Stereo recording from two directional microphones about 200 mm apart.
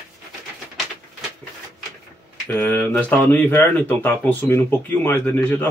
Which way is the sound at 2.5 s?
10° left (ahead or behind).